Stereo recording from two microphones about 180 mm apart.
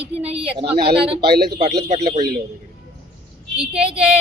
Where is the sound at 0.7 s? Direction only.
65° right (ahead or behind).